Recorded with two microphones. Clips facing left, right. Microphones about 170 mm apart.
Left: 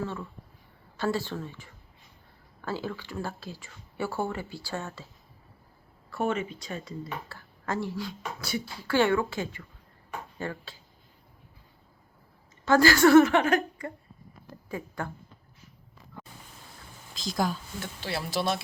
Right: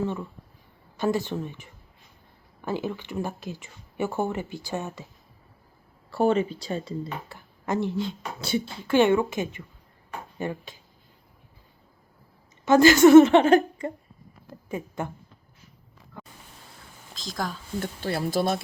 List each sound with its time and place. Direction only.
0.0 s speech: 15° right (ahead or behind)
6.1 s speech: 35° right (ahead or behind)
7.3 s a woman's voice: 20° right (ahead or behind)
12.6 s speech: 20° right (ahead or behind)
17.2 s speech: centre (ahead or behind)
17.7 s speech: 50° right (ahead or behind)